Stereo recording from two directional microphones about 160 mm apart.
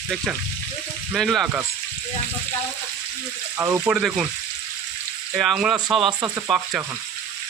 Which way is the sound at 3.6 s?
15° right (ahead or behind).